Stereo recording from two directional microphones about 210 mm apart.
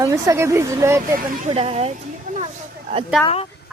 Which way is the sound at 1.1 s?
30° right (ahead or behind).